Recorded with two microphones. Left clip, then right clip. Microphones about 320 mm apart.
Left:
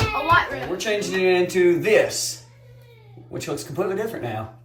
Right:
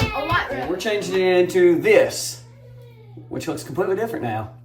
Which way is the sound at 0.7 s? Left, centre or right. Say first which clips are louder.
Right 1 dB; centre.